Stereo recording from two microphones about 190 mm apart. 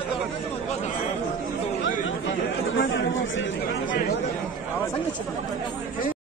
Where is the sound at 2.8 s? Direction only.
75° left (ahead or behind).